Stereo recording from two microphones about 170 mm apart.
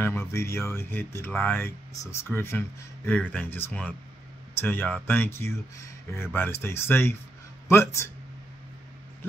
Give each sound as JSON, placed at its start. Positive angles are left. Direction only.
{"t": 0.0, "sound": "speech", "side_deg": 15}